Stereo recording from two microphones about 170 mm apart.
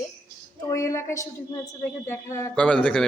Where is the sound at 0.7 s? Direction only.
15° left (ahead or behind).